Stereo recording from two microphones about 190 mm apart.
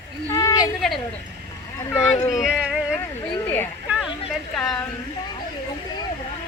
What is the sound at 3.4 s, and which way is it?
Speech, 10° left (ahead or behind).